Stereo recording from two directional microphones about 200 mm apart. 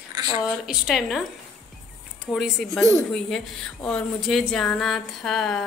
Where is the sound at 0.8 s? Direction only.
Centre (ahead or behind).